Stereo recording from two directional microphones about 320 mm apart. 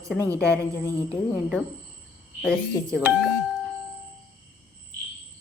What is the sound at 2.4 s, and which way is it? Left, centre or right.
Speech, centre.